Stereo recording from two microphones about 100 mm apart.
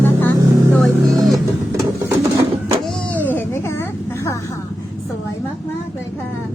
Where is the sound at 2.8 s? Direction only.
10° left (ahead or behind).